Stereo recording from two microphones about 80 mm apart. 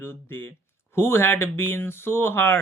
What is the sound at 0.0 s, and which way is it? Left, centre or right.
Speech, left.